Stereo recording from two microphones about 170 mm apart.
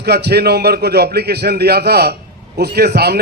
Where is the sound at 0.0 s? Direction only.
75° right (ahead or behind).